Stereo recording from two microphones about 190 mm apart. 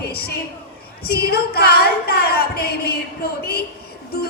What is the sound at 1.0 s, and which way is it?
A woman's voice, 55° left (ahead or behind).